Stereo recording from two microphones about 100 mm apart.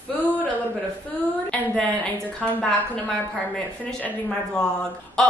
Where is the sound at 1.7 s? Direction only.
10° left (ahead or behind).